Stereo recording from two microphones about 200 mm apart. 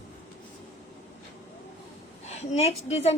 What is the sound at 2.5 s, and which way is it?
Speech, 30° left (ahead or behind).